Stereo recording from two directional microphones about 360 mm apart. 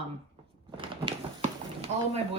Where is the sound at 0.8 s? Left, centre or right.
Centre.